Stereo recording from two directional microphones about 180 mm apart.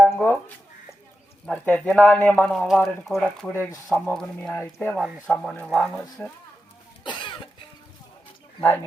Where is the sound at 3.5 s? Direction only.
15° left (ahead or behind).